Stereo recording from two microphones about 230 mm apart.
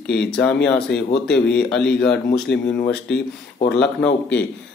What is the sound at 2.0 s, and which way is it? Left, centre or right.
Speech, left.